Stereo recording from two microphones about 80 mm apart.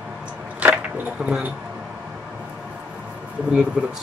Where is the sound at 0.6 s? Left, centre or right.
Centre.